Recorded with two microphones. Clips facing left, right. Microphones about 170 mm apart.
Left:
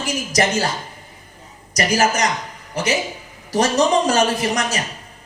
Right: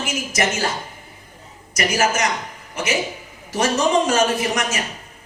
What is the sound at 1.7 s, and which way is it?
A man's voice, 35° left (ahead or behind).